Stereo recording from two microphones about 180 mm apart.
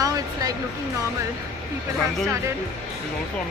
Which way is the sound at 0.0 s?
20° right (ahead or behind).